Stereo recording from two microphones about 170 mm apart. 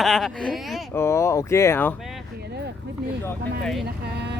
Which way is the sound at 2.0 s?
Centre (ahead or behind).